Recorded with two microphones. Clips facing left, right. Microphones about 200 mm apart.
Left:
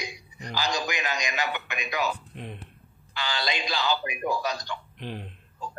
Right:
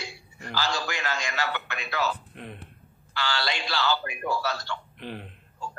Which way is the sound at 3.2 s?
20° left (ahead or behind).